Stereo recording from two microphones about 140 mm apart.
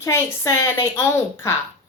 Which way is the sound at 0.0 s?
20° left (ahead or behind).